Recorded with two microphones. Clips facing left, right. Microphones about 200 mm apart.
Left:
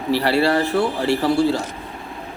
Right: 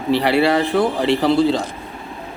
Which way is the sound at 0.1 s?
15° right (ahead or behind).